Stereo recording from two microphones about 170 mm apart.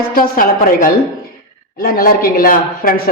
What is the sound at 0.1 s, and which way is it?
Speech, 55° left (ahead or behind).